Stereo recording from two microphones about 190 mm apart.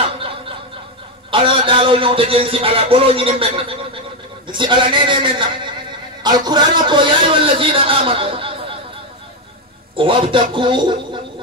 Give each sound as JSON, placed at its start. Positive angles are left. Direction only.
{"t": 1.3, "sound": "a man's voice", "side_deg": -30}
{"t": 9.9, "sound": "a man's voice", "side_deg": -25}